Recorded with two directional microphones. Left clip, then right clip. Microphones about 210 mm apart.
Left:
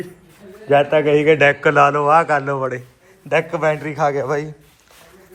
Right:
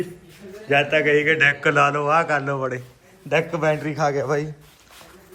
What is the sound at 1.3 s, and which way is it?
Speech, 10° left (ahead or behind).